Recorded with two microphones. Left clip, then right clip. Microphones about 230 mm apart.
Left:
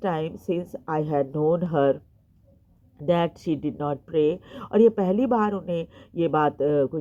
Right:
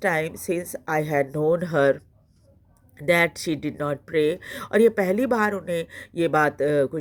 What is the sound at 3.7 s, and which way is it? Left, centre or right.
Speech, right.